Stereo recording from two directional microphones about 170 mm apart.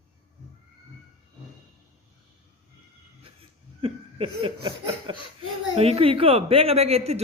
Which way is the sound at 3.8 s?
35° right (ahead or behind).